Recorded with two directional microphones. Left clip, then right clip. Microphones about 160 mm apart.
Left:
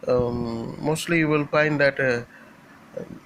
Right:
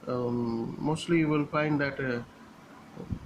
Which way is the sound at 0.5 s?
15° left (ahead or behind).